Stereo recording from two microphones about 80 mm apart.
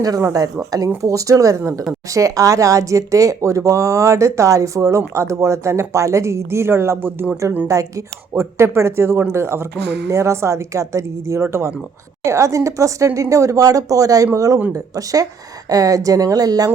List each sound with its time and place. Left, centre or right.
0.0 s speech: right
7.7 s speech: right